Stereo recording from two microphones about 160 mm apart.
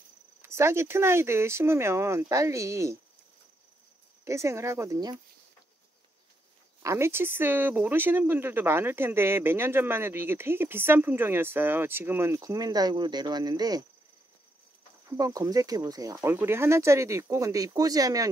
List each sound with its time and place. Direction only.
0.4 s speech: 15° right (ahead or behind)
4.2 s speech: 20° right (ahead or behind)
6.8 s speech: 15° right (ahead or behind)
15.1 s speech: 20° right (ahead or behind)